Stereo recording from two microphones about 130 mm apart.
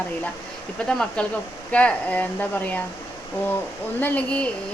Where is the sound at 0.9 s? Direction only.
5° left (ahead or behind).